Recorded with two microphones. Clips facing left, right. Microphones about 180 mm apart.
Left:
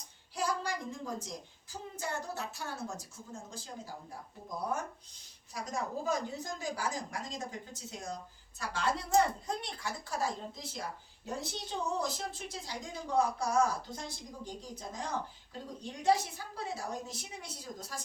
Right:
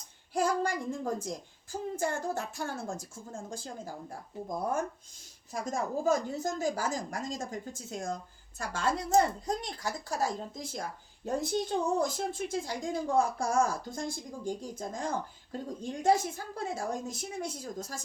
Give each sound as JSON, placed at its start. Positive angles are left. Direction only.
{"t": 0.3, "sound": "speech", "side_deg": -50}